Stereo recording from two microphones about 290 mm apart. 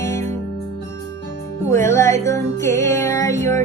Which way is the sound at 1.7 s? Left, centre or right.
Centre.